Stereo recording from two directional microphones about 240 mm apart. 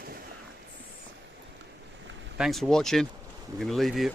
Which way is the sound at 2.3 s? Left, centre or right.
Centre.